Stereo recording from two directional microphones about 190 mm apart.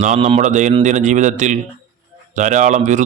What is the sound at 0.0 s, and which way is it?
Speech, 35° right (ahead or behind).